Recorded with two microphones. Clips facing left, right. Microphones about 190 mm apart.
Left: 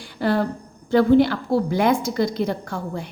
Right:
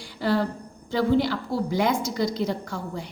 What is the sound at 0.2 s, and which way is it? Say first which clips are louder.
A woman's voice: left 3 dB; 55° left (ahead or behind).